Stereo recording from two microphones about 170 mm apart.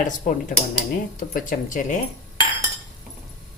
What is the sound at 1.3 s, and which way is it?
Speech, 50° left (ahead or behind).